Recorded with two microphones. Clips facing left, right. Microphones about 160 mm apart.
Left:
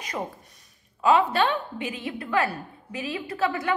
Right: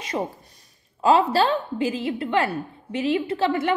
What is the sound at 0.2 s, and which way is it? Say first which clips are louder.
A woman's voice: right 5 dB; 25° right (ahead or behind).